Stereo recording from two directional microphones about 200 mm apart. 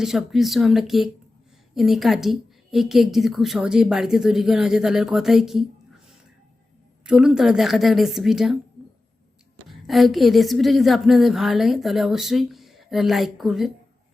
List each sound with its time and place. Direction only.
0.0 s a woman's voice: centre (ahead or behind)
9.6 s a woman's voice: centre (ahead or behind)